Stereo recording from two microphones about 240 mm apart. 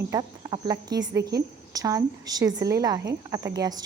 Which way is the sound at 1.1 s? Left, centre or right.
Right.